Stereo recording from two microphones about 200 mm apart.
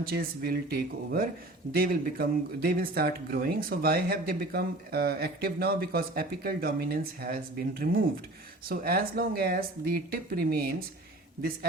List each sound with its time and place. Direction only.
0.0 s speech: 45° right (ahead or behind)